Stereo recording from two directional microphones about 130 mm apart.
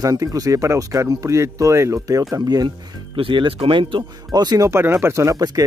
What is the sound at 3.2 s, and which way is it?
Speech, 45° right (ahead or behind).